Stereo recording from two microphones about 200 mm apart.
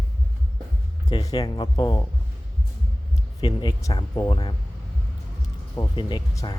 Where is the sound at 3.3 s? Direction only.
20° left (ahead or behind).